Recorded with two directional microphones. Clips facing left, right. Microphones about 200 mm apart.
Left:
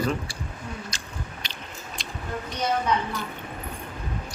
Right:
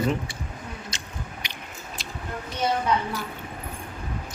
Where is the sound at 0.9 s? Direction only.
20° right (ahead or behind).